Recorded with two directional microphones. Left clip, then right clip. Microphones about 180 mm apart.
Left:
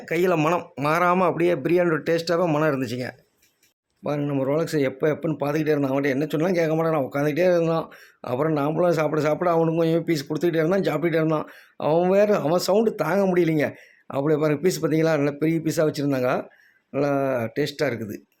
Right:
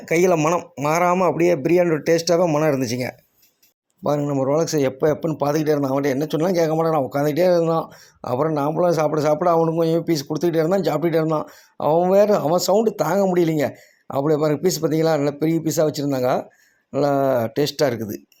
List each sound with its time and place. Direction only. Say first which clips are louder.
0.0 s speech: right 5 dB; 15° right (ahead or behind)
0.3 s speech: right 2 dB; centre (ahead or behind)
0.9 s speech: right 2 dB; 10° right (ahead or behind)
2.4 s speech: right 3 dB; centre (ahead or behind)
2.6 s speech: right 4 dB; 15° right (ahead or behind)
4.2 s speech: right 2 dB; centre (ahead or behind)